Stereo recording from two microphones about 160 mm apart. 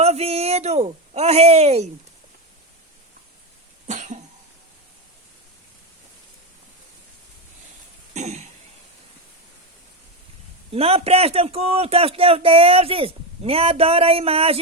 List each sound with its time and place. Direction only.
0.0 s a sound: 40° right (ahead or behind)
3.8 s cough: 50° right (ahead or behind)
8.1 s cough: 45° right (ahead or behind)
10.7 s a man's voice: 40° right (ahead or behind)